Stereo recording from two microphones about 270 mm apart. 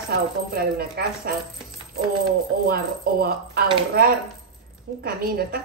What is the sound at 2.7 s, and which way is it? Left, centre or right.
Speech, right.